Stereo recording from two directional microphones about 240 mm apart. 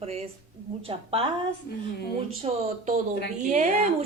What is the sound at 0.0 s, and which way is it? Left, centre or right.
A woman's voice, right.